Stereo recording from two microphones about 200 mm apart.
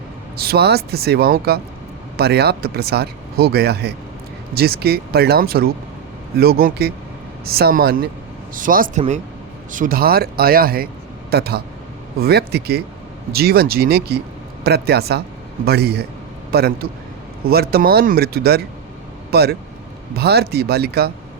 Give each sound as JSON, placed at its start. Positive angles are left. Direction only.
{"t": 0.3, "sound": "speech", "side_deg": -50}